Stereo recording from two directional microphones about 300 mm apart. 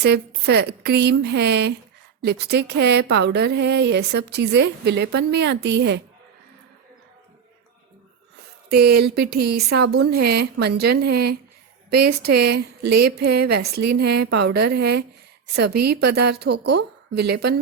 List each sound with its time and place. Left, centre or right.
0.0 s speech: right
8.7 s speech: right